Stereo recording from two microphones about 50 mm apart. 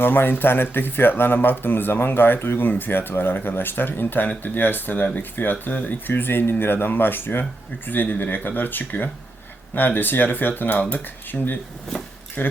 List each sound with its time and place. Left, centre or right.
0.0 s speech: left